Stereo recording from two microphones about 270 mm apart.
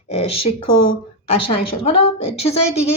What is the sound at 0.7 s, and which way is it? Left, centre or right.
Speech, left.